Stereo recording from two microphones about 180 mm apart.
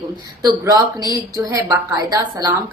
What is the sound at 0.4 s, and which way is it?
Speech, 20° right (ahead or behind).